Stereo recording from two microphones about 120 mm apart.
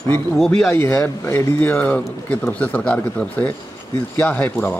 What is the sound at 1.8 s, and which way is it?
Speech, 10° left (ahead or behind).